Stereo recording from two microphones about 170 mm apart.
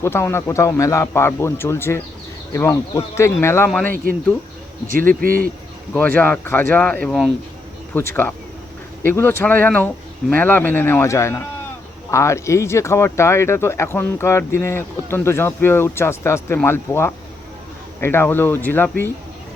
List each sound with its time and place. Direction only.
0.0 s speech: 15° left (ahead or behind)
3.7 s speech: 5° left (ahead or behind)
4.9 s speech: 55° right (ahead or behind)
5.9 s speech: 10° left (ahead or behind)
9.0 s speech: 10° left (ahead or behind)